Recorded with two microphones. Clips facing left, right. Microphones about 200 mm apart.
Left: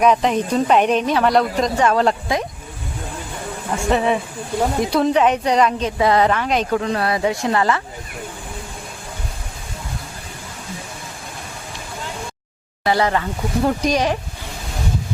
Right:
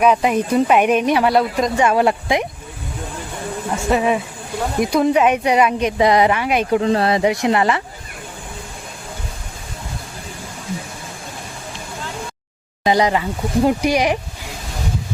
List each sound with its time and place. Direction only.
0.0 s speech: 5° right (ahead or behind)
3.8 s speech: 10° right (ahead or behind)
6.7 s speech: 25° right (ahead or behind)
12.8 s speech: 15° right (ahead or behind)